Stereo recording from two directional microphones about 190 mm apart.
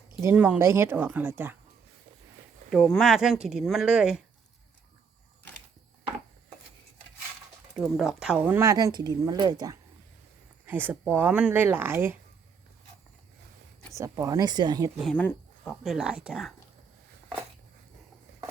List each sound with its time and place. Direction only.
0.2 s speech: 10° right (ahead or behind)
2.6 s speech: centre (ahead or behind)
7.8 s speech: centre (ahead or behind); by 9.7 s 20° right (ahead or behind)
10.7 s speech: 10° right (ahead or behind)
14.0 s speech: 15° right (ahead or behind)
15.0 s speech: 10° left (ahead or behind)